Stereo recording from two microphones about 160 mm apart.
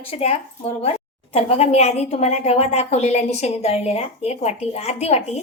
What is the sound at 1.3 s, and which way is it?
A woman's voice, 40° left (ahead or behind).